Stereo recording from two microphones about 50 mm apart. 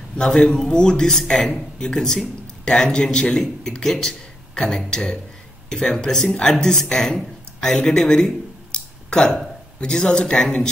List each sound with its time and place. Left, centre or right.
0.2 s speech: centre
8.7 s a sound: centre
9.8 s speech: centre